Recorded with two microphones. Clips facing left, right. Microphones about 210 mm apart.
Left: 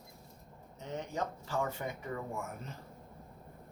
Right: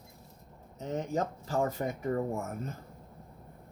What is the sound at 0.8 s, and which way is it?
Speech, 40° right (ahead or behind).